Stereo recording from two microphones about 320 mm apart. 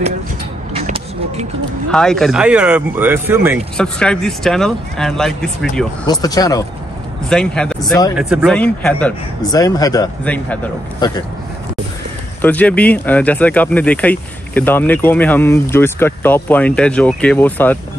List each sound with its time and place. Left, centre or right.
0.7 s vehicle: right
1.9 s speech: centre
12.4 s speech: centre